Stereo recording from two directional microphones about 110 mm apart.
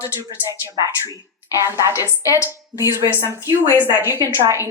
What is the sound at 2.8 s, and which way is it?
Speech, 25° right (ahead or behind).